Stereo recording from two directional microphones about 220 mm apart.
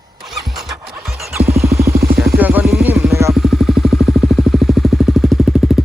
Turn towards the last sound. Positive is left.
turn(degrees=0)  # may be behind; listen again after turning